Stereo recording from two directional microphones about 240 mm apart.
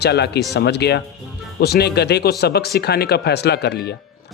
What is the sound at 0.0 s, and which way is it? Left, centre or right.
Speech, left.